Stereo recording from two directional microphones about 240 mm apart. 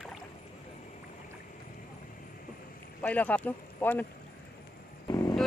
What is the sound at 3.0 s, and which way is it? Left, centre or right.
Speech, centre.